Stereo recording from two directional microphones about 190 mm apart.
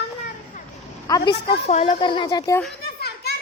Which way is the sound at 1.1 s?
20° left (ahead or behind).